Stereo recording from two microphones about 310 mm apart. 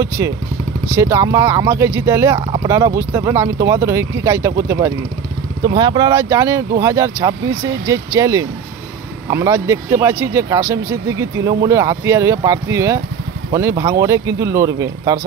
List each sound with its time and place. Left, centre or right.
0.2 s speech: centre